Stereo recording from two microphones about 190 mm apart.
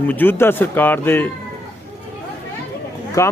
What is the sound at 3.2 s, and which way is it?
Speech, 15° left (ahead or behind).